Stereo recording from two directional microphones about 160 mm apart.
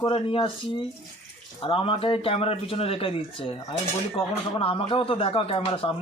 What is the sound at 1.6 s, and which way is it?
Speech, 35° left (ahead or behind).